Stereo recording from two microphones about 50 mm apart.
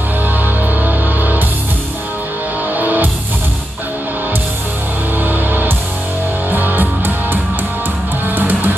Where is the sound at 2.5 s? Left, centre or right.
Right.